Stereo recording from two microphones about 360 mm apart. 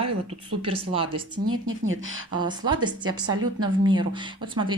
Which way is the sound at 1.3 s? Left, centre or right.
Right.